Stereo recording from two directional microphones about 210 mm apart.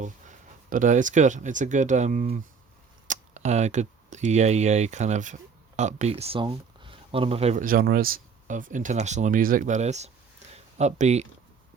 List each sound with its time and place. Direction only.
0.0 s speech: 35° right (ahead or behind)